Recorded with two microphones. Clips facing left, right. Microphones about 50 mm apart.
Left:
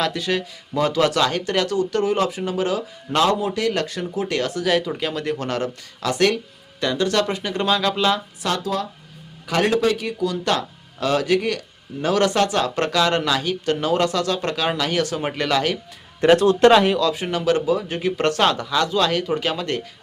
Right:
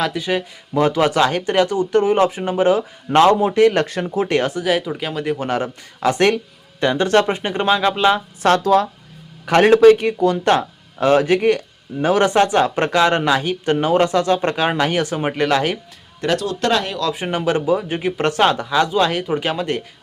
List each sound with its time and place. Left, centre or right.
0.0 s speech: centre; by 4.5 s right
4.5 s speech: centre
8.4 s speech: right
16.2 s speech: left
17.2 s speech: right